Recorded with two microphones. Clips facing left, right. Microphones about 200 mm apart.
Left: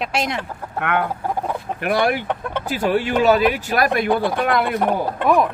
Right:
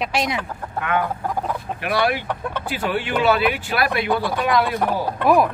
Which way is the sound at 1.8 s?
45° left (ahead or behind).